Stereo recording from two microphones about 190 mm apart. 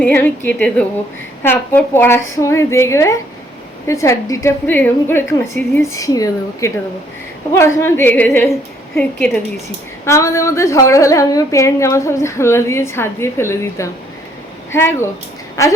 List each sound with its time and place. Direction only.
0.0 s a woman's voice: 10° left (ahead or behind)
10.1 s a woman's voice: 15° left (ahead or behind)